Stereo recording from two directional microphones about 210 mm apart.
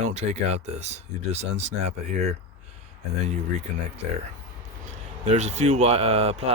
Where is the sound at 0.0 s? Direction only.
35° right (ahead or behind).